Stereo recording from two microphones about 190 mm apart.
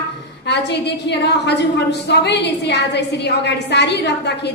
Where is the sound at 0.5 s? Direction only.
65° left (ahead or behind).